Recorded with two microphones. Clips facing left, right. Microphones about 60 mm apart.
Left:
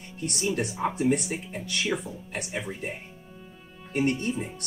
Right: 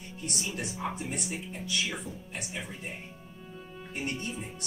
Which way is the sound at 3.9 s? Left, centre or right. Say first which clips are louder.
Left 10 dB; left.